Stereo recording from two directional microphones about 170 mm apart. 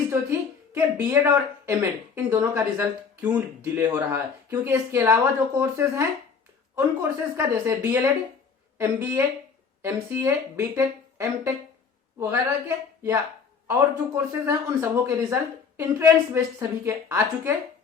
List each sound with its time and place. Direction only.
0.1 s speech: 15° right (ahead or behind)